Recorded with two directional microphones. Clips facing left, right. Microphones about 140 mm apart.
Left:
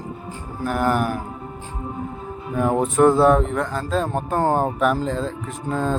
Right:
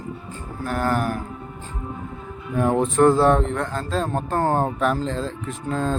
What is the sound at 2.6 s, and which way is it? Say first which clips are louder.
Speech: left 1 dB; 5° left (ahead or behind).